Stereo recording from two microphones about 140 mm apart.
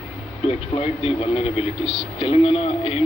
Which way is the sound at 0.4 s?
45° left (ahead or behind).